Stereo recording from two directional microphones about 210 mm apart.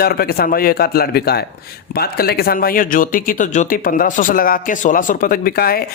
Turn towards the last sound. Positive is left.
turn(degrees=45)  # may be behind; listen again after turning